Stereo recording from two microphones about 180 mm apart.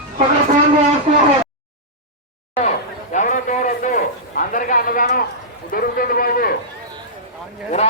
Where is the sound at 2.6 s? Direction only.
45° left (ahead or behind).